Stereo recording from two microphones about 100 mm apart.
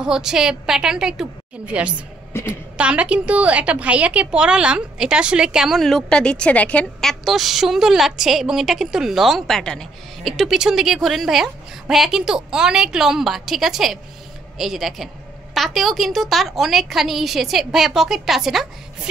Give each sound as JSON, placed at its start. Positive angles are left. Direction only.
{"t": 0.0, "sound": "a woman's voice", "side_deg": -5}
{"t": 2.3, "sound": "a woman's voice", "side_deg": 25}
{"t": 2.8, "sound": "a woman's voice", "side_deg": -10}